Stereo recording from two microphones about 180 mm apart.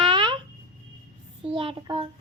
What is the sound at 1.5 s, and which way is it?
Speech, 30° right (ahead or behind).